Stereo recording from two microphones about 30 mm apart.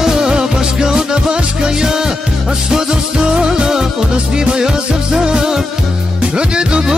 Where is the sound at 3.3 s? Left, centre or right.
Right.